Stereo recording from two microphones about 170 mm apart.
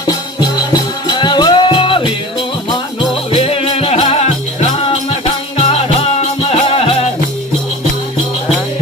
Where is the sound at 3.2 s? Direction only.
35° left (ahead or behind).